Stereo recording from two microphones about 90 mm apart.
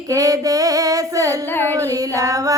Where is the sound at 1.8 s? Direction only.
40° right (ahead or behind).